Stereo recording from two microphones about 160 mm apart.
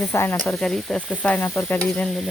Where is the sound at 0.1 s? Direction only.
15° left (ahead or behind).